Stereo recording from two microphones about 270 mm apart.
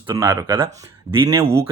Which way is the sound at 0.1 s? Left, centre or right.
Centre.